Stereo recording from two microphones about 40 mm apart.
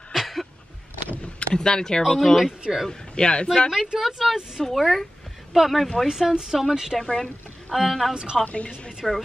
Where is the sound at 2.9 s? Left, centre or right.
Left.